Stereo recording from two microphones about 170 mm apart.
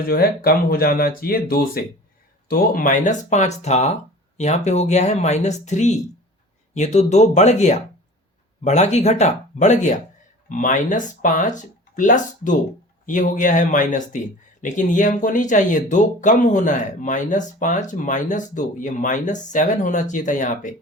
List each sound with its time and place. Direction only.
0.0 s speech: 60° left (ahead or behind)